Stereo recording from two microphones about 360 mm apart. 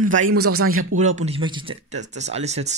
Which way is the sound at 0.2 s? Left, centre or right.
Right.